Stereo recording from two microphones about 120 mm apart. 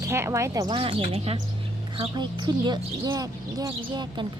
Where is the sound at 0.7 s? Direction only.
50° right (ahead or behind).